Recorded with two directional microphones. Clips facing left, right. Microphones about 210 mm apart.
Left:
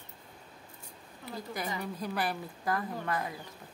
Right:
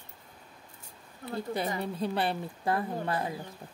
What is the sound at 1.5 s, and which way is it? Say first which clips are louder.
Speech: right 4 dB; 30° right (ahead or behind).